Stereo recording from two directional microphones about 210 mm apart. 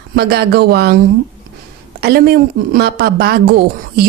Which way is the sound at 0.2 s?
50° right (ahead or behind).